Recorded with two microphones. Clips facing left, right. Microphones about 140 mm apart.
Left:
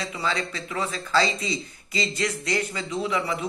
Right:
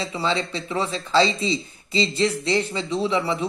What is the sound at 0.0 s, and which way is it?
Speech, 25° right (ahead or behind).